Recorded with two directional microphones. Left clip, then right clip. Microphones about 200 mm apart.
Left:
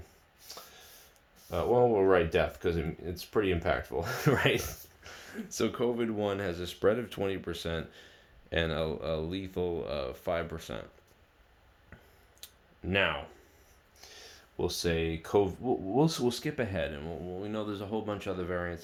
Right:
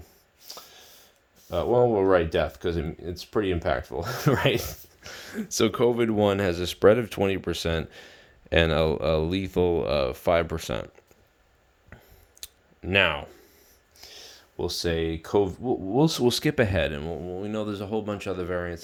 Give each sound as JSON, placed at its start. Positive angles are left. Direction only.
{"t": 0.0, "sound": "a sound", "side_deg": -50}
{"t": 1.5, "sound": "speech", "side_deg": -50}
{"t": 12.4, "sound": "clicking", "side_deg": -55}
{"t": 14.0, "sound": "speech", "side_deg": -55}